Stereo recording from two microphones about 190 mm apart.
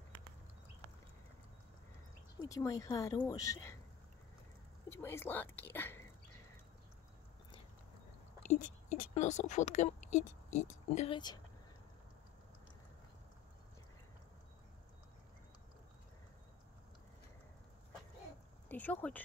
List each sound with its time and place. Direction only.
2.4 s speech: 15° left (ahead or behind)
4.8 s speech: 15° left (ahead or behind)
8.5 s speech: 40° left (ahead or behind)
11.0 s speech: 25° left (ahead or behind)
18.7 s speech: 10° left (ahead or behind)